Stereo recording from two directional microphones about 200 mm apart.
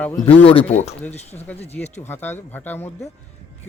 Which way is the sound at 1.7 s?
10° left (ahead or behind).